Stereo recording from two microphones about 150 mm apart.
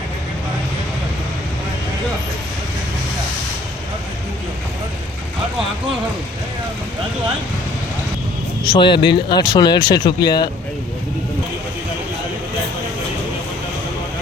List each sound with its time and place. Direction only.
8.6 s speech: 35° left (ahead or behind)